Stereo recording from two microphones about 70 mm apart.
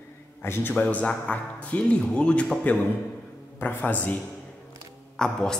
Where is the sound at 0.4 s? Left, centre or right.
Left.